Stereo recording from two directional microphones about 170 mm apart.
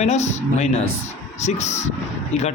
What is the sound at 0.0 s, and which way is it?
A man's voice, 40° left (ahead or behind).